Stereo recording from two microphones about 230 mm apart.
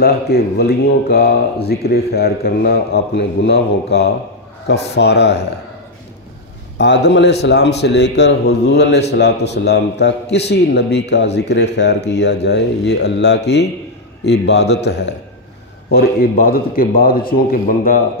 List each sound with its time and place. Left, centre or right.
0.0 s speech: left
6.8 s speech: left